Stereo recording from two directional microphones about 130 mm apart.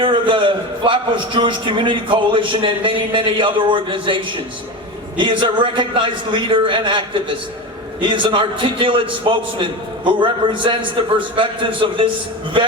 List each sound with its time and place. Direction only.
0.0 s a man's voice: 40° right (ahead or behind)